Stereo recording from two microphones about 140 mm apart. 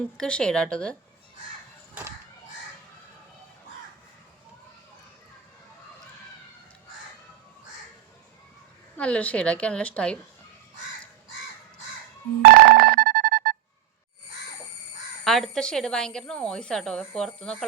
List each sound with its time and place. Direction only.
0.2 s a woman's voice: 5° left (ahead or behind)
9.0 s a woman's voice: 10° left (ahead or behind)
12.5 s music: 90° right
15.2 s speech: centre (ahead or behind)